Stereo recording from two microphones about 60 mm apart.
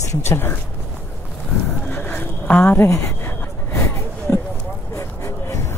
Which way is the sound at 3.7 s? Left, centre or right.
Left.